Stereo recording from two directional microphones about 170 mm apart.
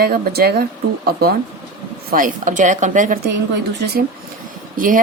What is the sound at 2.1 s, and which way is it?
Speech, 50° right (ahead or behind).